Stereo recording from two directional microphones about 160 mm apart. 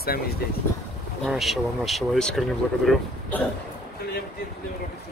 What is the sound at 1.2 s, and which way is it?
Speech, centre (ahead or behind).